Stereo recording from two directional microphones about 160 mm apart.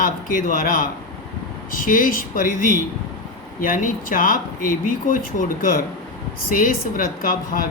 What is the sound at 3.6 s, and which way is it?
Speech, 60° left (ahead or behind).